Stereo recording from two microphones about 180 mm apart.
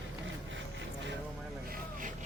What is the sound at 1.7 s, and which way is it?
Vehicle, 50° right (ahead or behind).